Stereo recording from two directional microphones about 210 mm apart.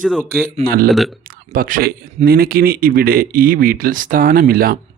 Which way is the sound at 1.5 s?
40° right (ahead or behind).